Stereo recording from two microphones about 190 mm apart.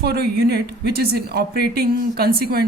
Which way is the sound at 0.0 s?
60° right (ahead or behind).